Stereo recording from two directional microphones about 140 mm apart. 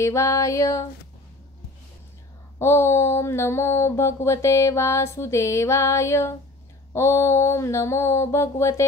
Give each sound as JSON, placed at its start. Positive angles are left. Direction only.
{"t": 0.0, "sound": "mantra", "side_deg": 20}
{"t": 2.6, "sound": "mantra", "side_deg": 20}